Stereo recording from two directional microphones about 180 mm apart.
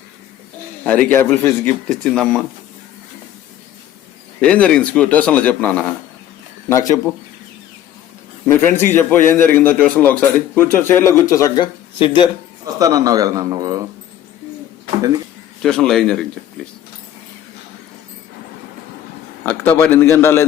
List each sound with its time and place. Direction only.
0.9 s speech: 10° left (ahead or behind)
4.4 s speech: 5° left (ahead or behind)
6.7 s speech: 20° left (ahead or behind)
8.4 s speech: 10° left (ahead or behind); by 12.3 s 30° left (ahead or behind)
12.6 s speech: 20° right (ahead or behind)
15.6 s a man's voice: 5° left (ahead or behind)
19.5 s speech: 10° left (ahead or behind)